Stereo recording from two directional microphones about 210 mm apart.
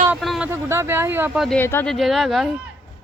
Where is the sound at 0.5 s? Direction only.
15° right (ahead or behind).